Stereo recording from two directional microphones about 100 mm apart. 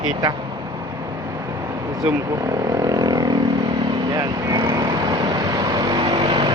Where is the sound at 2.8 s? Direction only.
40° right (ahead or behind).